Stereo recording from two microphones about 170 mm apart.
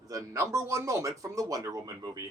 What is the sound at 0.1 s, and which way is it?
A man's voice, 20° right (ahead or behind).